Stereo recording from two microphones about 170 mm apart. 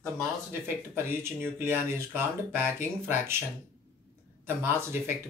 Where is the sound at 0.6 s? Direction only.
15° right (ahead or behind).